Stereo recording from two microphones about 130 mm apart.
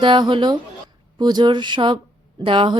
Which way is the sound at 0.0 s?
40° right (ahead or behind).